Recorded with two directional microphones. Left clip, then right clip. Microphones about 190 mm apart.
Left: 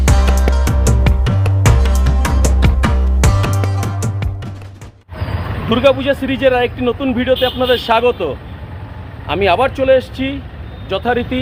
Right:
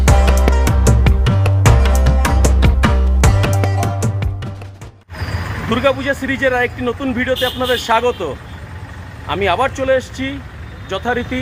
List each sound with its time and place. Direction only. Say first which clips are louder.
0.0 s music: right 2 dB; centre (ahead or behind)
5.6 s speech: left 3 dB; centre (ahead or behind)